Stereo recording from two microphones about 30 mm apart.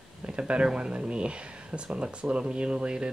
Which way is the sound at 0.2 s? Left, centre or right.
Right.